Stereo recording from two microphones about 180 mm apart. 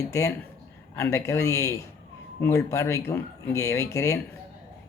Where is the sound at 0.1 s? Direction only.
15° left (ahead or behind).